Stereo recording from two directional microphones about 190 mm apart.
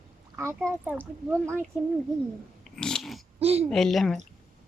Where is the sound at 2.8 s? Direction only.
5° left (ahead or behind).